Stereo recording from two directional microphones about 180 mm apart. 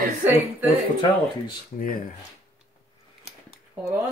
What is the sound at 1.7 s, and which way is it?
Speech, 50° left (ahead or behind).